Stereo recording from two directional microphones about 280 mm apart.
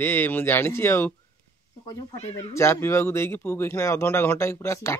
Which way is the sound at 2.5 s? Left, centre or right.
Centre.